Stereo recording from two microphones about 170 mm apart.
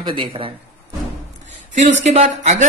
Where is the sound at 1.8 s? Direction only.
45° right (ahead or behind).